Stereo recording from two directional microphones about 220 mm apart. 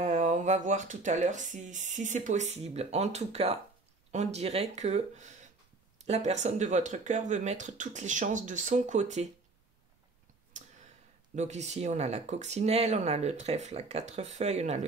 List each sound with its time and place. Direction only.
0.0 s speech: 35° right (ahead or behind)
11.3 s speech: 30° right (ahead or behind)